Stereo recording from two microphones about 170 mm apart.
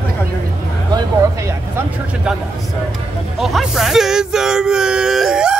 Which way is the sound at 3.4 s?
Centre (ahead or behind).